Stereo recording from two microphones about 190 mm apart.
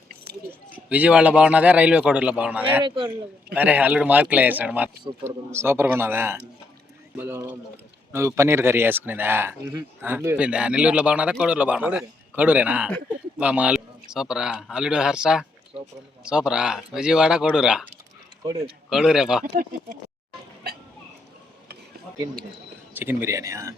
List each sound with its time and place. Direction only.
0.9 s speech: 5° right (ahead or behind)
2.8 s speech: 25° right (ahead or behind)
3.5 s a man's voice: 10° right (ahead or behind)
18.9 s a man's voice: centre (ahead or behind)
23.0 s speech: 15° right (ahead or behind)